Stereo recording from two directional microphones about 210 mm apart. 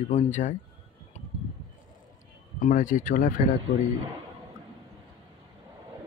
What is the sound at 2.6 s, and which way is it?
Speech, 40° left (ahead or behind).